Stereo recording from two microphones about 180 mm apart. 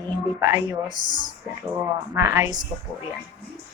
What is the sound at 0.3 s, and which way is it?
Speech, 15° right (ahead or behind).